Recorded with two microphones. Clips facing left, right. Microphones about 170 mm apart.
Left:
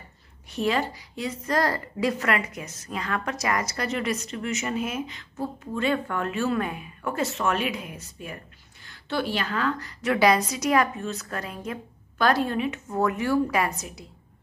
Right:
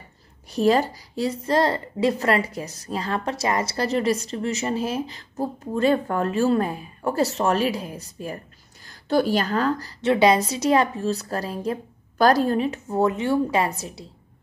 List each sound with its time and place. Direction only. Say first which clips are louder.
0.5 s a woman's voice: right 6 dB; 40° right (ahead or behind)